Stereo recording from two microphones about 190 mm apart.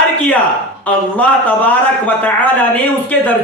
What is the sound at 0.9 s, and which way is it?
Speech, 5° left (ahead or behind).